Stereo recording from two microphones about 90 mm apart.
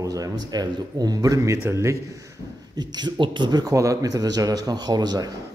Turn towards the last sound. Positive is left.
turn(degrees=-50)  # may be behind; listen again after turning